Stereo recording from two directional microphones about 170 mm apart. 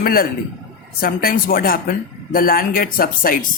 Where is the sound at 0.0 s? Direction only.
60° left (ahead or behind).